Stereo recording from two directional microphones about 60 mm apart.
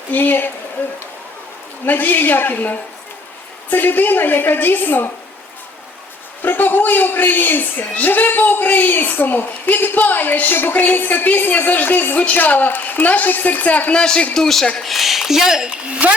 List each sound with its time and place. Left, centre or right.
0.1 s a woman's voice: left
1.8 s a woman's voice: left
6.4 s a woman's voice: left
14.3 s speech: centre
15.9 s speech: right